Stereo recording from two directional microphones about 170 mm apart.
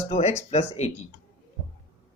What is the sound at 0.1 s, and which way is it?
Speech, 40° left (ahead or behind).